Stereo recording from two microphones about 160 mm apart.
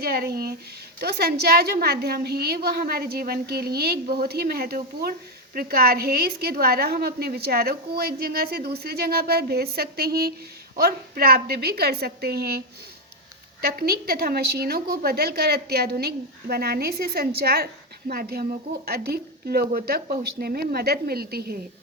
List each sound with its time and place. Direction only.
0.0 s a woman's voice: 75° right (ahead or behind)